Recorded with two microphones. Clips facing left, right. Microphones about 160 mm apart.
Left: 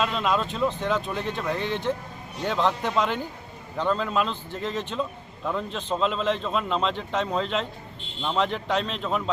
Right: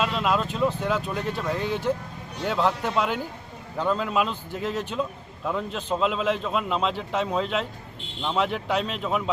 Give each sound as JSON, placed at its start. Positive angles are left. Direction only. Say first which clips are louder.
{"t": 0.0, "sound": "a man's voice", "louder": "even", "side_deg": -5}